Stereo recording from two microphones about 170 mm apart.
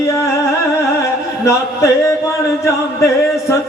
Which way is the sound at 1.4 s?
20° left (ahead or behind).